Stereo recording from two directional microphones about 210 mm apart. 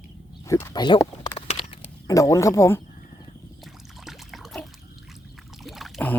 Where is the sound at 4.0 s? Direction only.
Centre (ahead or behind).